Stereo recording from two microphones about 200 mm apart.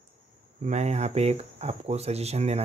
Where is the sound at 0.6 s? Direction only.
35° right (ahead or behind).